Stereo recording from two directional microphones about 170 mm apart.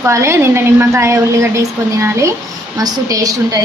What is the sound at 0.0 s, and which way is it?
A woman's voice, 15° right (ahead or behind).